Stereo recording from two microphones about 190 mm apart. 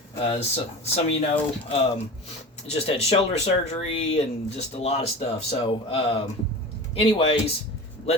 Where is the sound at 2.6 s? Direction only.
30° left (ahead or behind).